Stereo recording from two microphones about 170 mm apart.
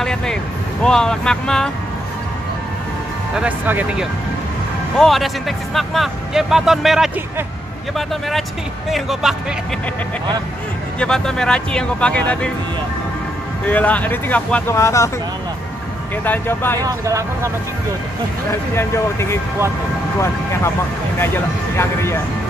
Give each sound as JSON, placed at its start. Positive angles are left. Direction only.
{"t": 0.0, "sound": "speech", "side_deg": 5}
{"t": 3.3, "sound": "speech", "side_deg": -10}
{"t": 8.1, "sound": "speech", "side_deg": 0}
{"t": 11.0, "sound": "speech", "side_deg": 5}
{"t": 13.7, "sound": "speech", "side_deg": 10}
{"t": 16.3, "sound": "speech", "side_deg": 15}
{"t": 16.8, "sound": "speech", "side_deg": -20}
{"t": 18.8, "sound": "speech", "side_deg": 15}
{"t": 21.2, "sound": "speech", "side_deg": 15}